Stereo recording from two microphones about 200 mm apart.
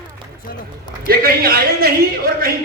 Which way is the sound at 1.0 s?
50° right (ahead or behind).